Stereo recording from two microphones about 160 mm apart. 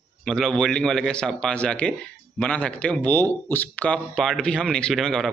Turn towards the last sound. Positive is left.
turn(degrees=0)  # may be behind; listen again after turning